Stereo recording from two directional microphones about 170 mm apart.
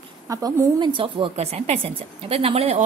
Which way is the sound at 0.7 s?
30° right (ahead or behind).